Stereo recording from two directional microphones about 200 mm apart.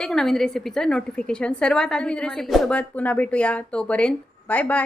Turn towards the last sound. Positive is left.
turn(degrees=5)  # may be behind; listen again after turning